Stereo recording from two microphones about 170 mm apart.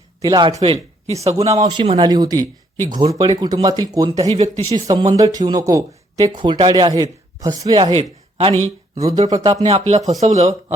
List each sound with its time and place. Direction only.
0.2 s speech: 25° right (ahead or behind)
1.5 s speech: 25° right (ahead or behind)
4.4 s speech: 40° right (ahead or behind)
4.7 s speech: 25° right (ahead or behind)
9.1 s speech: 20° right (ahead or behind)
9.6 s speech: 40° right (ahead or behind)